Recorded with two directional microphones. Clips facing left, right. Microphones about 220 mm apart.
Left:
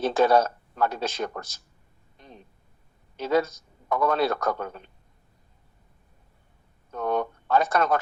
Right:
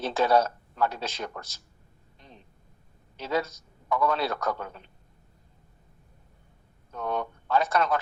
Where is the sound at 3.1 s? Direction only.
50° left (ahead or behind).